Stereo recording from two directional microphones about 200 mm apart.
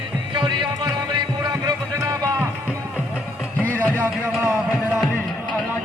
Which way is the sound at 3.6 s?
10° left (ahead or behind).